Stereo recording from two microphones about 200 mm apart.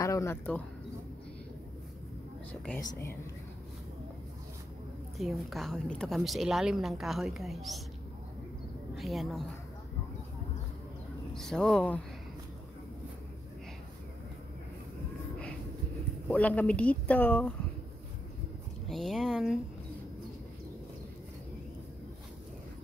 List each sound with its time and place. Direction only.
0.0 s speech: 15° left (ahead or behind)
2.8 s speech: 15° left (ahead or behind)
5.1 s a woman's voice: centre (ahead or behind)
8.9 s a woman's voice: centre (ahead or behind)
11.3 s a woman's voice: centre (ahead or behind)
16.3 s speech: 5° left (ahead or behind)
18.9 s a woman's voice: centre (ahead or behind)